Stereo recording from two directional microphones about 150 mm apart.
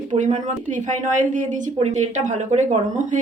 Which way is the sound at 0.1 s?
50° right (ahead or behind).